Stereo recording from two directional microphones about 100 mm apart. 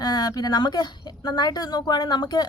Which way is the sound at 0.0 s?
40° left (ahead or behind).